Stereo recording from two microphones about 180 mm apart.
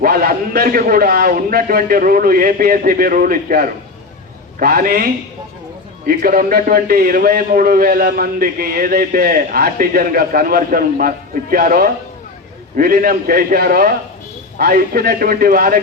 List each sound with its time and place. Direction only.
0.0 s a man's voice: 55° right (ahead or behind)